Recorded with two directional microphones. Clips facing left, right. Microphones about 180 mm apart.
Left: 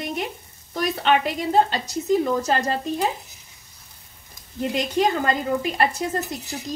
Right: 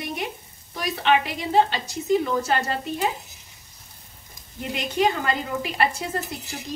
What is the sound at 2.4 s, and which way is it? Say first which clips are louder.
Speech: left 2 dB; 40° left (ahead or behind).